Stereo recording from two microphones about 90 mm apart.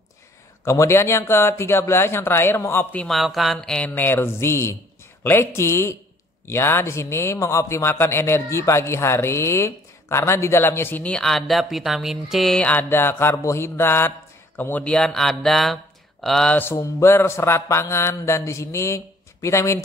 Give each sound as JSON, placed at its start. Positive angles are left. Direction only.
{"t": 0.7, "sound": "a man's voice", "side_deg": 30}
{"t": 3.1, "sound": "speech", "side_deg": 0}
{"t": 3.9, "sound": "a man's voice", "side_deg": 25}
{"t": 11.1, "sound": "speech", "side_deg": 5}
{"t": 12.6, "sound": "a man's voice", "side_deg": 20}
{"t": 16.5, "sound": "mantra", "side_deg": 25}